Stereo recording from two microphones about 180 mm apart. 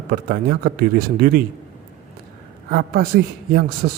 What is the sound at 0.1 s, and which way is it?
Speech, 55° right (ahead or behind).